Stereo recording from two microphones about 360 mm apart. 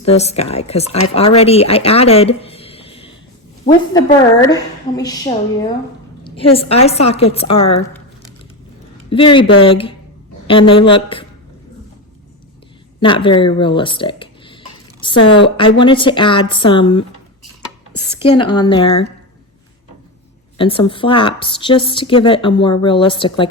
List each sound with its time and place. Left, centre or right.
0.0 s a woman's voice: centre
9.0 s a woman's voice: centre
13.0 s a woman's voice: centre
20.6 s a woman's voice: centre